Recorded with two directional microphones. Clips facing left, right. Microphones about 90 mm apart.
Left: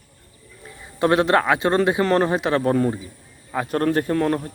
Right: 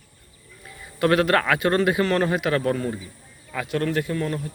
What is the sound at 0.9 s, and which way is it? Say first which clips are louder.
A man's voice: left 2 dB; 25° left (ahead or behind).